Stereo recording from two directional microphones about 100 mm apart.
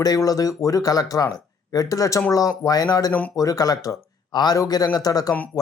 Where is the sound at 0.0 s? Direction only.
35° left (ahead or behind).